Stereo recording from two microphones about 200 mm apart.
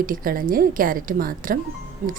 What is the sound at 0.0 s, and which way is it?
A woman's voice, 45° right (ahead or behind).